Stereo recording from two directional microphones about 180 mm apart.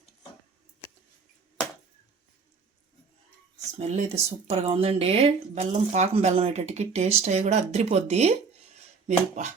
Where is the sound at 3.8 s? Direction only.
40° right (ahead or behind).